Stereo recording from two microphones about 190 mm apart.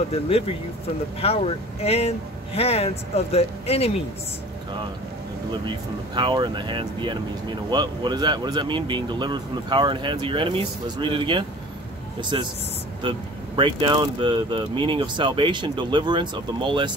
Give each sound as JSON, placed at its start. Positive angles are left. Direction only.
{"t": 0.1, "sound": "speech", "side_deg": 30}
{"t": 5.5, "sound": "speech", "side_deg": -25}